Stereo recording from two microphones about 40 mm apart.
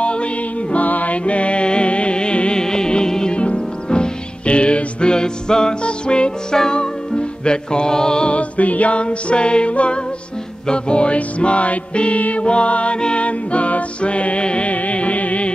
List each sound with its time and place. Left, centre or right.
0.0 s music: left
0.8 s music: left